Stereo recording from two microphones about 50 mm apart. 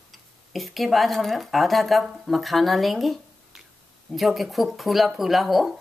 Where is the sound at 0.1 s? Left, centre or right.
Centre.